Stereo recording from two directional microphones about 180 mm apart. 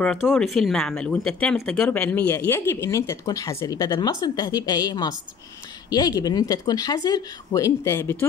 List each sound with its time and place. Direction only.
0.0 s speech: 5° left (ahead or behind)